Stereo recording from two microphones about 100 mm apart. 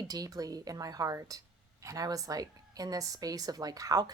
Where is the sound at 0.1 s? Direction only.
40° right (ahead or behind).